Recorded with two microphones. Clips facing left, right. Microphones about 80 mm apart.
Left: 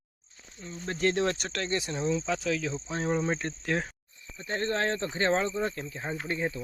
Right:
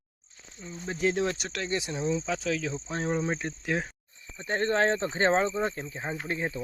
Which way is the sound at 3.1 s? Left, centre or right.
Centre.